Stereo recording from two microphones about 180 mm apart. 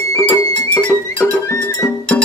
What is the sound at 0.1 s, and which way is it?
Music, 5° left (ahead or behind).